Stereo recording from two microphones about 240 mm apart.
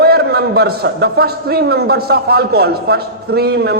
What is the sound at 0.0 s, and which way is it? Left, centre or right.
A man's voice, right.